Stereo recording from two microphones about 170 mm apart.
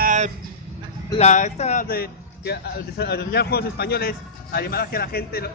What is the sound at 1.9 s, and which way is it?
A man's voice, 65° left (ahead or behind).